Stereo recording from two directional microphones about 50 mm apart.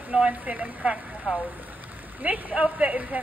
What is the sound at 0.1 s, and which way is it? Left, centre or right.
Speech, centre.